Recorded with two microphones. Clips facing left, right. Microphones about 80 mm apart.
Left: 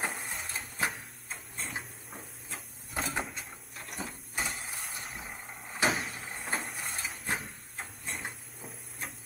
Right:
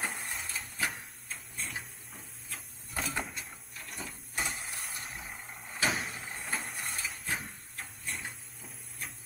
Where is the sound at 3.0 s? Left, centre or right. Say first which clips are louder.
Left 1 dB; centre.